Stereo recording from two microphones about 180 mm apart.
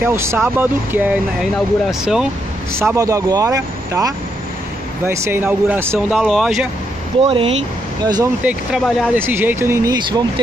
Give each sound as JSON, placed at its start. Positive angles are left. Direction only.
{"t": 0.0, "sound": "speech", "side_deg": -15}
{"t": 2.7, "sound": "speech", "side_deg": -15}
{"t": 5.9, "sound": "speech", "side_deg": 0}
{"t": 7.2, "sound": "speech", "side_deg": -30}
{"t": 8.0, "sound": "speech", "side_deg": -20}
{"t": 8.5, "sound": "speech", "side_deg": 0}
{"t": 9.1, "sound": "speech", "side_deg": -10}